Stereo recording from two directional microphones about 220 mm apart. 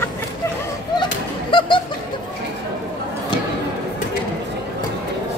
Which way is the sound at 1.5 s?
20° left (ahead or behind).